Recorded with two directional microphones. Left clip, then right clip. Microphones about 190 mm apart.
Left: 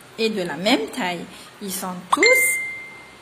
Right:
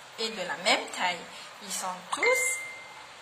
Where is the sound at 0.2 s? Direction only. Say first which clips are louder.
Left 8 dB; 40° left (ahead or behind).